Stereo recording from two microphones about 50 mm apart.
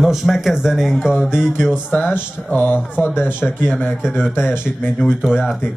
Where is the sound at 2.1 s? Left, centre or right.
Left.